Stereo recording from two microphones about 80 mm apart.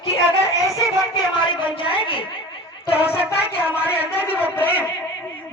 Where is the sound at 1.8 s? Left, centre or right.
Left.